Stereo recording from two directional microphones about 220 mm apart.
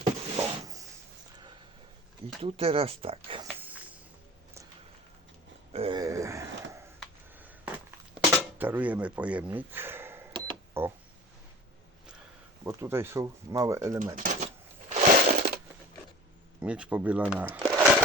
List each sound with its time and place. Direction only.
0.0 s a sound: 15° right (ahead or behind)
2.4 s speech: 25° right (ahead or behind)
3.4 s walk: 5° right (ahead or behind)
5.7 s a sound: 25° right (ahead or behind)
10.3 s cash register: 20° right (ahead or behind)
12.6 s speech: 10° right (ahead or behind)
14.2 s crushing: 35° right (ahead or behind)
16.6 s speech: 5° right (ahead or behind)